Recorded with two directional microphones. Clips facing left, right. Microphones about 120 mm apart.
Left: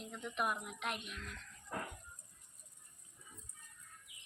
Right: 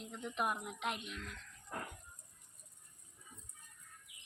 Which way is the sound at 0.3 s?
20° right (ahead or behind).